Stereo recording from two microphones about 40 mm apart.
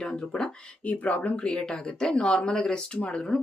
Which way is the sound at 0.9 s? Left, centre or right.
Left.